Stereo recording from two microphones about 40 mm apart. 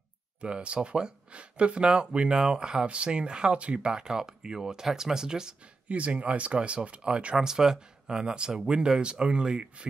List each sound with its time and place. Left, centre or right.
0.4 s speech: right
3.9 s speech: centre
5.9 s speech: right
7.3 s speech: centre